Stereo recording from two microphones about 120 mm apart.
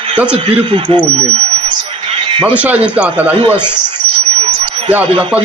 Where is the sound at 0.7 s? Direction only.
40° right (ahead or behind).